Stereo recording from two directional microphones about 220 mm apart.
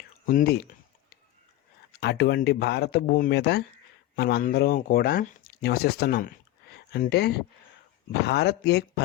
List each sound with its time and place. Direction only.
0.3 s speech: 40° left (ahead or behind)
1.9 s speech: 45° left (ahead or behind)